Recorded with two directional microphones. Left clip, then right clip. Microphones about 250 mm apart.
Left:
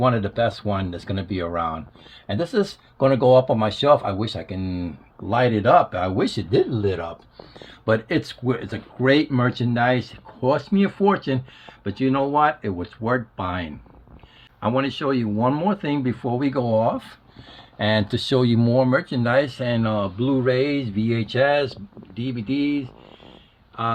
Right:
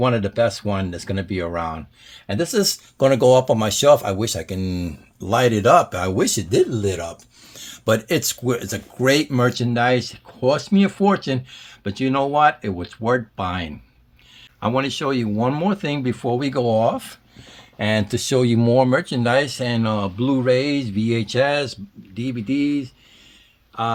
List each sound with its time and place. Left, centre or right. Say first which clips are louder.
0.0 s speech: right 2 dB; right
17.7 s speech: even; right